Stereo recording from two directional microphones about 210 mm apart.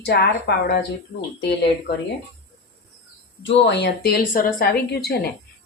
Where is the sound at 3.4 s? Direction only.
55° left (ahead or behind).